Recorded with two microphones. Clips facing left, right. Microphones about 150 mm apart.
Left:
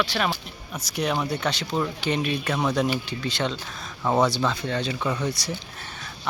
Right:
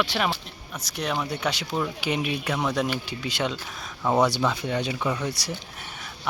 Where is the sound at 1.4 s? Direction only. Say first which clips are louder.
Left 1 dB; 10° right (ahead or behind).